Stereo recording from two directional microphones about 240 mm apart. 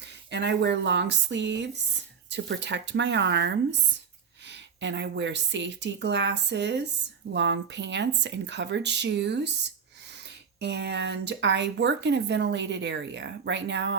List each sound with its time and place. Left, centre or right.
0.0 s speech: right